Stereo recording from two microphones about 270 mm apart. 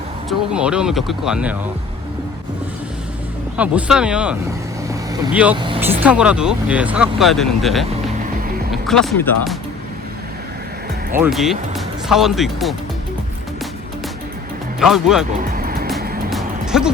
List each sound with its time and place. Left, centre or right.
0.3 s speech: centre
3.6 s speech: centre
5.5 s speech: centre
6.0 s speech: centre
11.2 s speech: centre
14.8 s speech: centre
15.3 s music: right
16.3 s music: centre